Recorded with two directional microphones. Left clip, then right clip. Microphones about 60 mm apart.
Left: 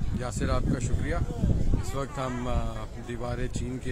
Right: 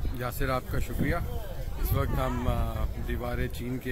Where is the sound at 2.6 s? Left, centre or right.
Left.